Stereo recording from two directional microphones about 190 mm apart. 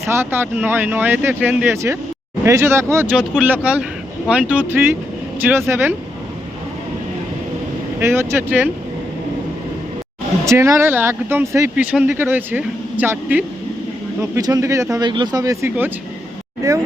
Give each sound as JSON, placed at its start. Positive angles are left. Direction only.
{"t": 0.0, "sound": "speech", "side_deg": -15}
{"t": 7.9, "sound": "speech", "side_deg": -10}
{"t": 10.4, "sound": "speech", "side_deg": -15}